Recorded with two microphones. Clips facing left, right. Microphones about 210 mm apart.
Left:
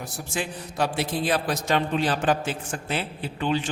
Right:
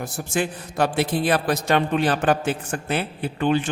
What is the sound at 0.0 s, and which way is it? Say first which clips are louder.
A woman's voice: right 6 dB; 55° right (ahead or behind).